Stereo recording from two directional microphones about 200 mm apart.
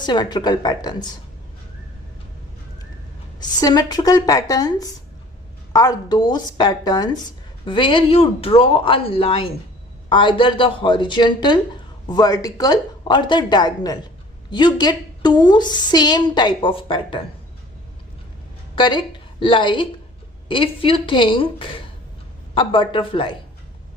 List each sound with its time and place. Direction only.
0.0 s a woman's voice: 20° left (ahead or behind)
3.6 s a woman's voice: 20° left (ahead or behind)
18.8 s a woman's voice: 25° left (ahead or behind)